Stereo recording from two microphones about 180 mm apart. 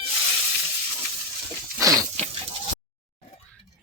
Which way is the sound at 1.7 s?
15° right (ahead or behind).